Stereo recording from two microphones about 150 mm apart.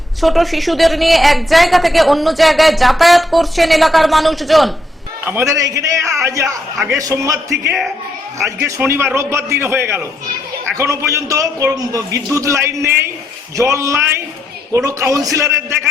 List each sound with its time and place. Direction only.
0.2 s a woman's voice: centre (ahead or behind)
5.2 s a man's voice: 15° right (ahead or behind)
8.6 s a man's voice: 15° right (ahead or behind)